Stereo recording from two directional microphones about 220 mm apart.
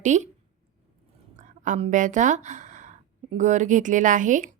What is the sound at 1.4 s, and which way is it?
Speech, 35° right (ahead or behind).